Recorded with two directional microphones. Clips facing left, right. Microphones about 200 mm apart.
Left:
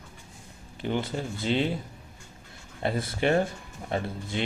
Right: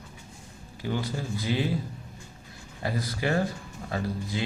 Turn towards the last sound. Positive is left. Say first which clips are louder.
# even
turn(degrees=25)  # may be behind; listen again after turning